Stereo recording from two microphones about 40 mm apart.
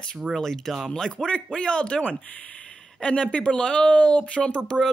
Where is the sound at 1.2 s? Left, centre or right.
Left.